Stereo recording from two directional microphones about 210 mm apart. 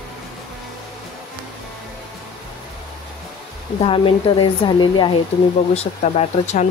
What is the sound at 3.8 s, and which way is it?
Speech, 25° left (ahead or behind).